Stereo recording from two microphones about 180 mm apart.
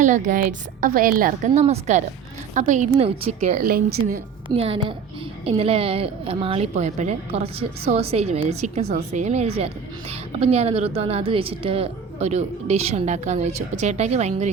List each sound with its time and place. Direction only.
0.0 s a woman's voice: 45° right (ahead or behind)
3.6 s a woman's voice: 55° right (ahead or behind)
4.4 s a woman's voice: 30° right (ahead or behind)